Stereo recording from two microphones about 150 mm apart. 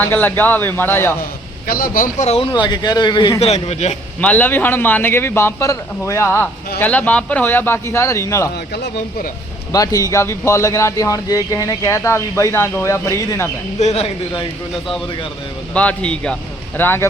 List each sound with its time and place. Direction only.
0.0 s a man's voice: 10° left (ahead or behind)
1.6 s speech: 75° left (ahead or behind)
2.2 s speech: 45° left (ahead or behind)
2.5 s a man's voice: 30° left (ahead or behind)
3.4 s speech: 45° left (ahead or behind)
4.2 s a man's voice: 10° left (ahead or behind)
8.5 s speech: 80° left
9.7 s a man's voice: 25° left (ahead or behind)
13.7 s speech: 45° left (ahead or behind)
15.7 s a man's voice: 10° left (ahead or behind)